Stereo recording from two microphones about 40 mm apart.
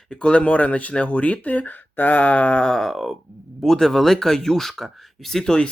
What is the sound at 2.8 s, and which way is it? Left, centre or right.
Speech, centre.